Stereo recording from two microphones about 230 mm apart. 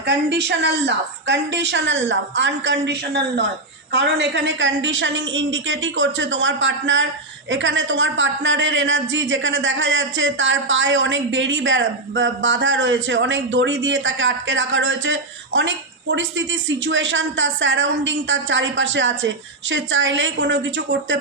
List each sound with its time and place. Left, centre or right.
0.0 s a man's voice: right